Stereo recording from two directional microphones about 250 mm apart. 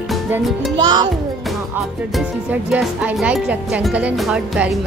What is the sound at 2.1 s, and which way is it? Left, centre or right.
Speech, centre.